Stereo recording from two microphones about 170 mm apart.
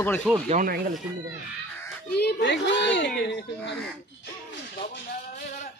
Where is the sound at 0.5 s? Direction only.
55° right (ahead or behind).